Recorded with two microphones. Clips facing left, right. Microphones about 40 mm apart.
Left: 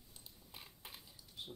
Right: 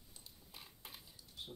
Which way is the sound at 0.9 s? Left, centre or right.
Centre.